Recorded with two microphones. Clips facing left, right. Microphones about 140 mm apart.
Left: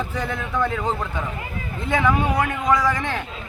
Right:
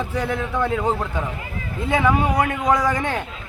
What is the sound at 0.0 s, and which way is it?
A man's voice, 10° right (ahead or behind).